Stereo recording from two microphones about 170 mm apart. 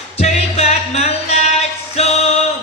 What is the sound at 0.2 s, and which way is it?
Music, 40° left (ahead or behind).